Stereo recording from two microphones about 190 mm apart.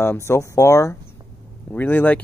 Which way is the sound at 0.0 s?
15° left (ahead or behind).